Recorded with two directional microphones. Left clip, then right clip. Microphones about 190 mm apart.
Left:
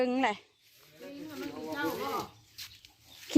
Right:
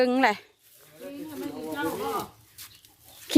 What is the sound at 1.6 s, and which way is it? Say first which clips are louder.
Bird: right 4 dB; 50° right (ahead or behind).